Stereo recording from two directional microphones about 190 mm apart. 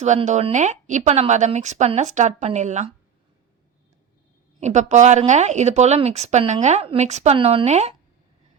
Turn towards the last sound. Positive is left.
turn(degrees=-35)  # may be behind; listen again after turning